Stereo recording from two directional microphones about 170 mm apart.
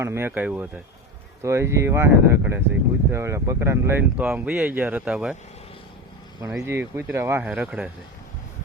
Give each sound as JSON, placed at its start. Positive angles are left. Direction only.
{"t": 0.0, "sound": "speech", "side_deg": -15}
{"t": 6.6, "sound": "speech", "side_deg": -15}